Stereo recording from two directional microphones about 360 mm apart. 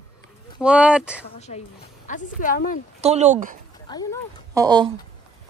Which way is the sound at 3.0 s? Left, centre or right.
Centre.